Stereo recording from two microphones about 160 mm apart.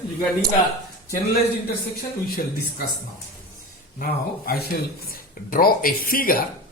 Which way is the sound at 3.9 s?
65° left (ahead or behind).